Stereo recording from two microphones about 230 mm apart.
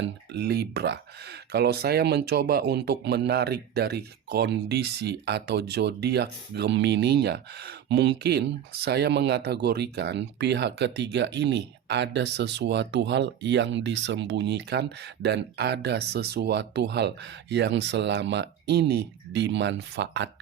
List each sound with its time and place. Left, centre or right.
0.0 s speech: right